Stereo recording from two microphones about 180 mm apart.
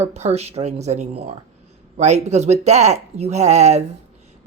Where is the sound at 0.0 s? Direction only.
35° right (ahead or behind).